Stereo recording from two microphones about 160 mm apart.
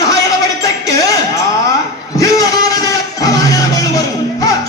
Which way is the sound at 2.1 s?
20° left (ahead or behind).